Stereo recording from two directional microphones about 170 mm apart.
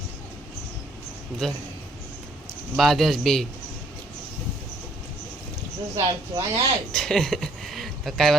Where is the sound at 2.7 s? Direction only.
Centre (ahead or behind).